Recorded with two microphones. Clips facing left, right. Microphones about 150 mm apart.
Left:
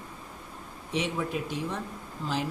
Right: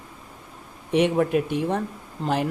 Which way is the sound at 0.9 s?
60° right (ahead or behind).